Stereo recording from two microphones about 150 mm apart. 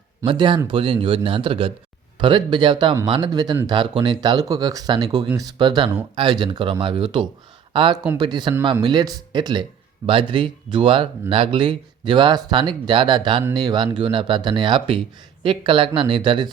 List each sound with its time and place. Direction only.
0.3 s speech: 30° right (ahead or behind)